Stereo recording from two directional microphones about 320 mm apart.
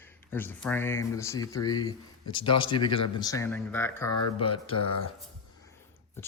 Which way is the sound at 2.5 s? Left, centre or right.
Left.